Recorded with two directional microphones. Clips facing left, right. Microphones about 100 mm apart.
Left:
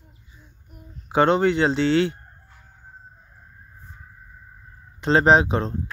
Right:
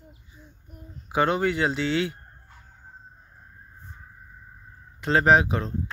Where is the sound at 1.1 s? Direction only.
30° left (ahead or behind).